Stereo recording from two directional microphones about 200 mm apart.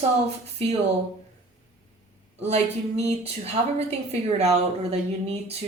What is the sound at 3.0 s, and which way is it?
A woman's voice, 30° right (ahead or behind).